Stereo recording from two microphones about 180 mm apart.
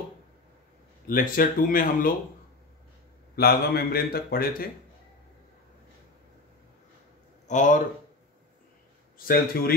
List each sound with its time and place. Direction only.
1.0 s speech: 50° left (ahead or behind)
3.3 s speech: 60° left (ahead or behind)
7.4 s a man's voice: 45° left (ahead or behind)
9.3 s speech: 55° left (ahead or behind)